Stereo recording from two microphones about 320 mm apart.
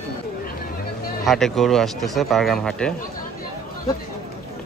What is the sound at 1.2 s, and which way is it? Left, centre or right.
Speech, centre.